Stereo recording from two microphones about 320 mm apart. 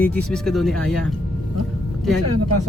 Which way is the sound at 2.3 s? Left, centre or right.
Right.